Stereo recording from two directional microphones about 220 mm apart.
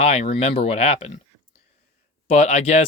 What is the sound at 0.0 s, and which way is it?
Speech, 30° left (ahead or behind).